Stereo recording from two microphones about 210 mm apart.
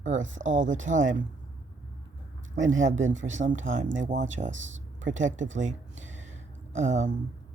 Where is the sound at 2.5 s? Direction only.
65° right (ahead or behind).